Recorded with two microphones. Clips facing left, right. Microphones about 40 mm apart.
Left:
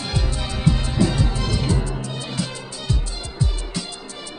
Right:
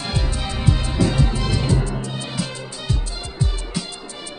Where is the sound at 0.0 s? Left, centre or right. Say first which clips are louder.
Right 1 dB; centre.